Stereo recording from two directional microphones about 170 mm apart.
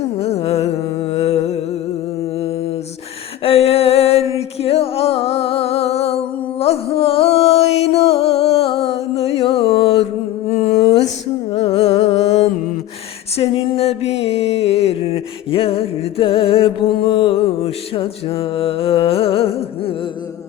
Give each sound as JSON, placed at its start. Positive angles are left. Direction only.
{"t": 0.2, "sound": "music", "side_deg": 35}
{"t": 3.4, "sound": "music", "side_deg": 35}
{"t": 10.6, "sound": "a sound", "side_deg": 40}
{"t": 11.5, "sound": "carnatic music", "side_deg": 35}
{"t": 13.3, "sound": "music", "side_deg": 35}